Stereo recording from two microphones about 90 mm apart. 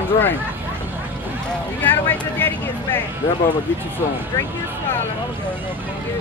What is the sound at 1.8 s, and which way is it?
Speech, 20° left (ahead or behind).